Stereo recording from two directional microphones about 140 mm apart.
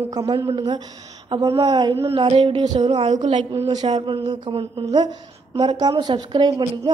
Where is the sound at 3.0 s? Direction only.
55° right (ahead or behind).